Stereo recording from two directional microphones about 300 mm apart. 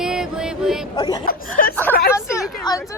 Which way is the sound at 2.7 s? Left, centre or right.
Centre.